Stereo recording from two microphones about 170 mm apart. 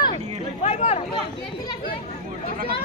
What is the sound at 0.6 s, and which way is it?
Speech, 40° left (ahead or behind).